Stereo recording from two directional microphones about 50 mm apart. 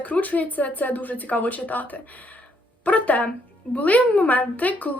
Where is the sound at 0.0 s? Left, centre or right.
Left.